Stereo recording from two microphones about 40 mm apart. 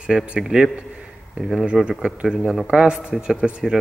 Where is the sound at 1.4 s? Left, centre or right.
Centre.